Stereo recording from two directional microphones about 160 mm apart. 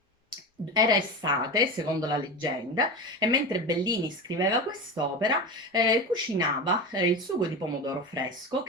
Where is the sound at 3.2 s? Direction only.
25° right (ahead or behind).